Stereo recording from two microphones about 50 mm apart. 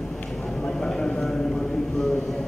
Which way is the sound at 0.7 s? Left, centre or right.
Centre.